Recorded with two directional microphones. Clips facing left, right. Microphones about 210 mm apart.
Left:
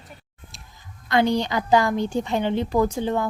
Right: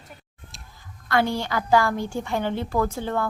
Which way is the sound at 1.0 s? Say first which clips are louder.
Left 3 dB; 20° left (ahead or behind).